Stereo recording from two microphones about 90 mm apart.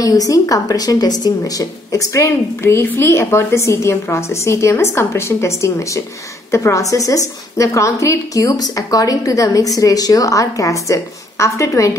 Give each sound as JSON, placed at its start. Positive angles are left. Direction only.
{"t": 0.0, "sound": "speech", "side_deg": 40}